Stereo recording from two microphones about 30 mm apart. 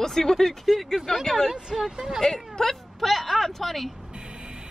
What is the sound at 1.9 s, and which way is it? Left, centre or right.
Speech, right.